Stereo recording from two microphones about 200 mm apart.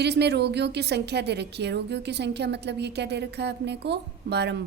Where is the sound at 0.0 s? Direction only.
55° right (ahead or behind).